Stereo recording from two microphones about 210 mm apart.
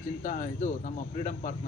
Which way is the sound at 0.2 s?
40° left (ahead or behind).